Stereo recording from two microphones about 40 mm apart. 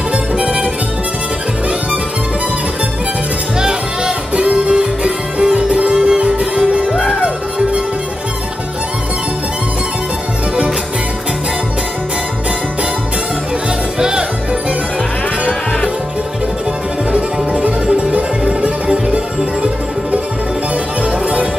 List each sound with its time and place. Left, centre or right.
0.4 s harmonica: right
3.5 s music: centre
13.9 s music: centre
17.1 s music: right